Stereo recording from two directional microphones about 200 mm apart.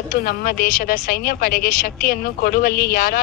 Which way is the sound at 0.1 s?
45° left (ahead or behind).